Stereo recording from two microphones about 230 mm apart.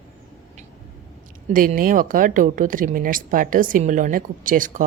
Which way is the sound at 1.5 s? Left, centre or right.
Right.